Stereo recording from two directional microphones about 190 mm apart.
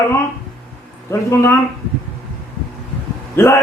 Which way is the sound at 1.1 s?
15° left (ahead or behind).